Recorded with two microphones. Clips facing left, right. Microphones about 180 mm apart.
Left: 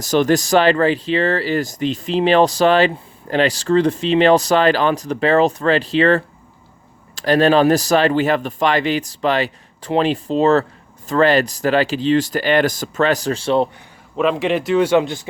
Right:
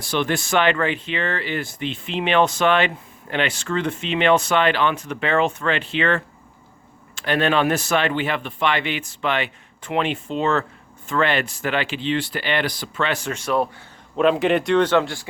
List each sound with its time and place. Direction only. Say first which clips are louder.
0.0 s a man's voice: left 8 dB; 40° left (ahead or behind)
14.2 s speech: even; centre (ahead or behind); by 15.3 s 20° left (ahead or behind)